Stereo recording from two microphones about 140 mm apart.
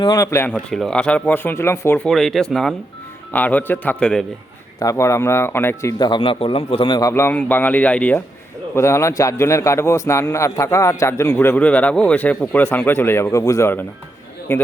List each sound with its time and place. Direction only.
0.0 s a man's voice: 25° left (ahead or behind)
0.5 s speech: centre (ahead or behind); by 2.0 s 15° left (ahead or behind)
2.0 s speech: centre (ahead or behind)
4.8 s a man's voice: 20° left (ahead or behind)
6.0 s a man's voice: 35° left (ahead or behind)
7.1 s speech: 15° left (ahead or behind)
8.7 s a man's voice: 20° left (ahead or behind)